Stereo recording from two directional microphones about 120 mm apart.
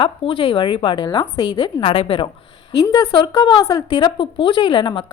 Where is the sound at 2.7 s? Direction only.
30° left (ahead or behind).